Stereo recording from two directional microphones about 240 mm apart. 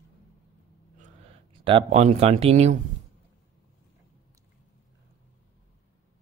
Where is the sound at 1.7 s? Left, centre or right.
Right.